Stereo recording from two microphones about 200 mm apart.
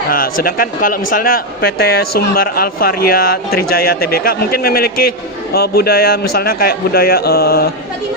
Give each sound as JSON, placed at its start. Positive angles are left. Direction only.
{"t": 0.1, "sound": "speech", "side_deg": 45}